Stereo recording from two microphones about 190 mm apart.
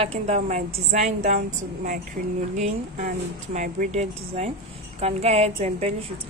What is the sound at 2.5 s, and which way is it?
A woman's voice, 40° right (ahead or behind).